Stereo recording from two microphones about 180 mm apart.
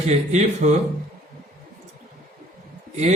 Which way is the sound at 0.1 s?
40° right (ahead or behind).